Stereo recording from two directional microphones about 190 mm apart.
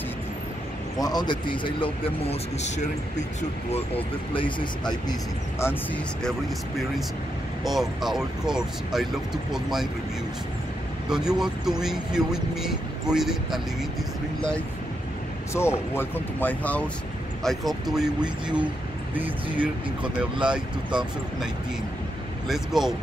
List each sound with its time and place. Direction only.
1.0 s a man's voice: 20° left (ahead or behind)
4.3 s a man's voice: 25° left (ahead or behind)
7.6 s speech: centre (ahead or behind)
11.1 s speech: 5° right (ahead or behind)
15.9 s speech: 10° left (ahead or behind)
19.6 s speech: 5° right (ahead or behind)
22.5 s speech: centre (ahead or behind)